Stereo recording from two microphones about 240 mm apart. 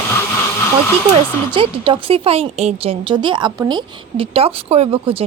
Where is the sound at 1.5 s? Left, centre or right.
Right.